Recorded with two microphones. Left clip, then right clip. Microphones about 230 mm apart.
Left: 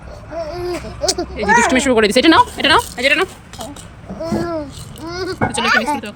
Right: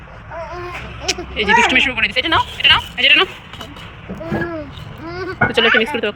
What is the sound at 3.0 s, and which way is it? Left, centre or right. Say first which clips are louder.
Speech: right 3 dB; centre.